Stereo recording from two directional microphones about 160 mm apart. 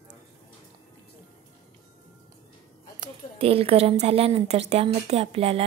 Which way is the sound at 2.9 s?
35° right (ahead or behind).